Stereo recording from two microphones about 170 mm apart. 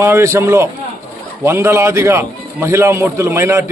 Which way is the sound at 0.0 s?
15° right (ahead or behind).